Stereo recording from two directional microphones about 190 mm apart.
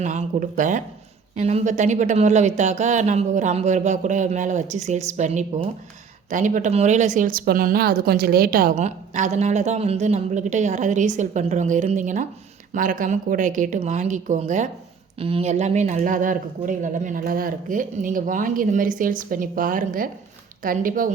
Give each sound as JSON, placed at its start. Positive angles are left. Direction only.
{"t": 0.0, "sound": "speech", "side_deg": -40}